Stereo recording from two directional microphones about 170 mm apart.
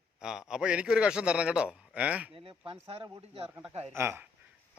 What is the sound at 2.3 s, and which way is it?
Speech, 30° right (ahead or behind).